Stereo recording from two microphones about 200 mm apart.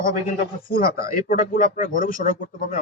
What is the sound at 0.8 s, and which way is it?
Speech, 45° left (ahead or behind).